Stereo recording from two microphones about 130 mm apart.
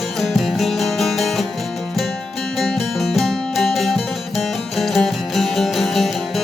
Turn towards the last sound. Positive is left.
turn(degrees=0)  # may be behind; listen again after turning